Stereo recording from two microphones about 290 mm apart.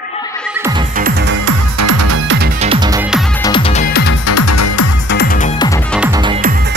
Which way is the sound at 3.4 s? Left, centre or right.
Centre.